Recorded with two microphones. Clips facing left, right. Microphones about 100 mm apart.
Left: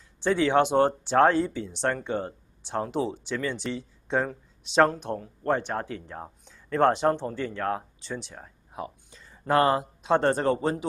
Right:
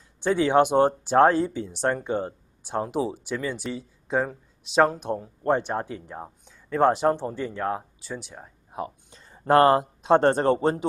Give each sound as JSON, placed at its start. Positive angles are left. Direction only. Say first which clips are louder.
{"t": 0.2, "sound": "speech", "louder": "right 2 dB", "side_deg": -15}
{"t": 9.2, "sound": "speech", "louder": "right 5 dB", "side_deg": -35}